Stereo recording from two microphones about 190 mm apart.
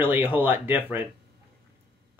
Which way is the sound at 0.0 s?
10° right (ahead or behind).